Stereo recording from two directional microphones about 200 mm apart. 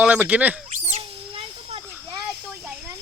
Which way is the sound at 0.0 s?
5° right (ahead or behind).